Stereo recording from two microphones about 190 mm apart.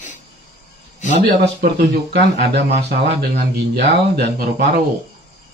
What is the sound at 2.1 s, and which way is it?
A man's voice, 60° right (ahead or behind).